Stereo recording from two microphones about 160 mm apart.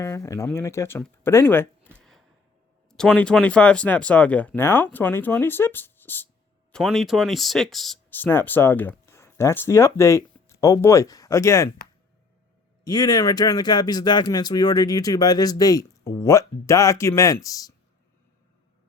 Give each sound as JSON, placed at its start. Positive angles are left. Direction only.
{"t": 0.0, "sound": "speech", "side_deg": 15}
{"t": 1.2, "sound": "a sound", "side_deg": 15}
{"t": 2.9, "sound": "speech", "side_deg": 5}
{"t": 6.7, "sound": "speech", "side_deg": 5}
{"t": 8.1, "sound": "speech", "side_deg": 15}
{"t": 12.8, "sound": "speech", "side_deg": 25}